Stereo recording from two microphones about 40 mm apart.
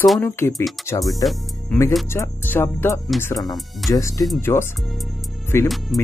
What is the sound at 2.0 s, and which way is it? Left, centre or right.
Speech, left.